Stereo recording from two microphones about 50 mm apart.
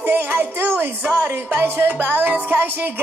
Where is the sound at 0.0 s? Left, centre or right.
Right.